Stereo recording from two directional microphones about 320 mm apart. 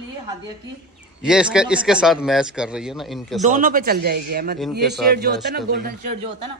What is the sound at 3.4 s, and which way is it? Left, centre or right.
A man's voice, right.